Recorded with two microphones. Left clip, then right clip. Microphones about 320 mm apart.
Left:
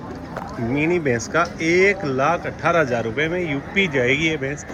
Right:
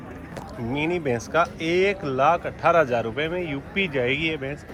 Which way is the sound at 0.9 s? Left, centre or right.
Right.